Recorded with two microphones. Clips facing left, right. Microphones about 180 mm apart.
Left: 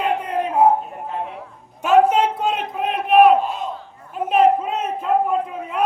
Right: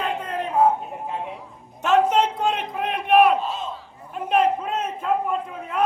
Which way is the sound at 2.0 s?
10° left (ahead or behind).